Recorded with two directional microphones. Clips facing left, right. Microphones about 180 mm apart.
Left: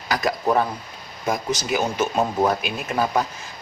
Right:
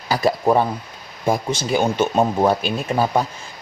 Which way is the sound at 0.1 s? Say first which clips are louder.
Right 4 dB; 30° right (ahead or behind).